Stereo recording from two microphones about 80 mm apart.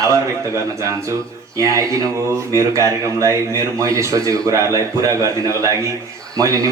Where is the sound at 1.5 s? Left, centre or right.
Right.